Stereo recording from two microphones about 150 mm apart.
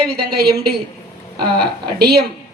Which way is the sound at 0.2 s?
90° right.